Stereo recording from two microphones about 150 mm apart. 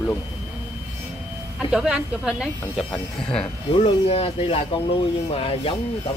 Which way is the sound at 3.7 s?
40° left (ahead or behind).